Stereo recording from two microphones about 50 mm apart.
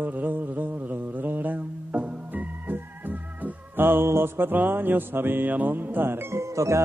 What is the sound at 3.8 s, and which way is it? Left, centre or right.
Speech, right.